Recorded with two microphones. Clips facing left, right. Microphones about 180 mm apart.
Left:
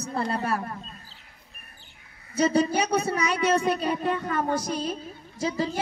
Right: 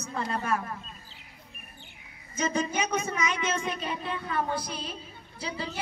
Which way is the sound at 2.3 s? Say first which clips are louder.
Left 7 dB; 35° left (ahead or behind).